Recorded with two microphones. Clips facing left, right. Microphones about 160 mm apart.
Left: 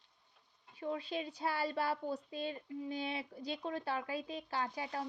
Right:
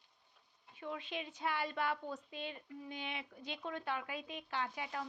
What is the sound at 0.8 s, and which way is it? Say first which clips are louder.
A woman's voice: left 5 dB; 35° left (ahead or behind).